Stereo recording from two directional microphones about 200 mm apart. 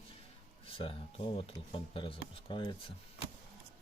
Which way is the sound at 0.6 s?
25° left (ahead or behind).